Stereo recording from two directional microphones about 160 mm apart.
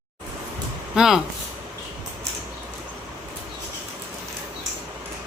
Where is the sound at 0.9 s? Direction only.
5° right (ahead or behind).